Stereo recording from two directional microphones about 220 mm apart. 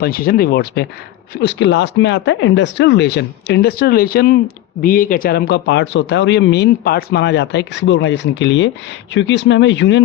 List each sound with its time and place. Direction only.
0.0 s speech: 40° left (ahead or behind)